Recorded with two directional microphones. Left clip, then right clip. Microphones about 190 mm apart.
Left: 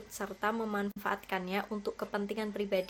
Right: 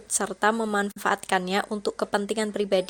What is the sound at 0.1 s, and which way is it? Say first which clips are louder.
A woman's voice: right 11 dB; 40° right (ahead or behind).